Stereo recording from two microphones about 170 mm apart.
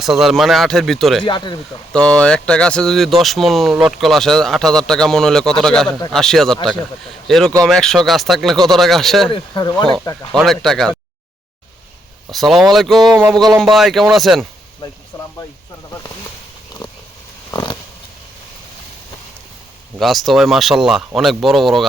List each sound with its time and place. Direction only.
0.0 s speech: centre (ahead or behind)
1.2 s speech: 25° left (ahead or behind)
1.9 s speech: 5° left (ahead or behind)
9.3 s speech: 25° left (ahead or behind)
10.3 s speech: centre (ahead or behind)
12.3 s speech: centre (ahead or behind)
14.8 s speech: 25° left (ahead or behind)
16.8 s a sound: 30° left (ahead or behind)
17.5 s pig: 25° left (ahead or behind)
20.0 s speech: centre (ahead or behind)